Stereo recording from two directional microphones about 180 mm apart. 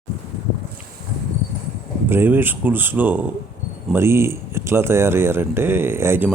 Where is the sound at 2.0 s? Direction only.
10° right (ahead or behind).